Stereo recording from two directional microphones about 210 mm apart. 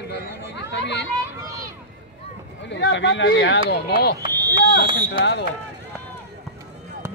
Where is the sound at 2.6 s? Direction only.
60° left (ahead or behind).